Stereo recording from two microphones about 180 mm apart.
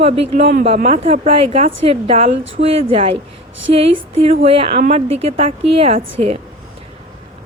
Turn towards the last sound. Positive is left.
turn(degrees=-35)  # may be behind; listen again after turning